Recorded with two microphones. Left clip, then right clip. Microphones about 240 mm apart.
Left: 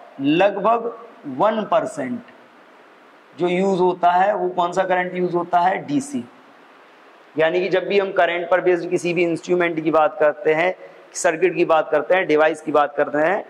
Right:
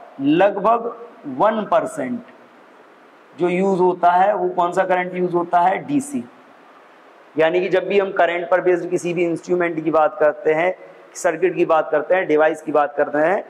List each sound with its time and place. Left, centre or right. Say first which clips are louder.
0.2 s a man's voice: right 1 dB; left
3.3 s a man's voice: right 1 dB; left
7.3 s a man's voice: right 1 dB; left